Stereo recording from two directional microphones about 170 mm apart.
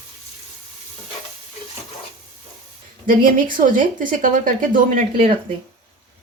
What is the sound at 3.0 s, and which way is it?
Speech, 50° right (ahead or behind).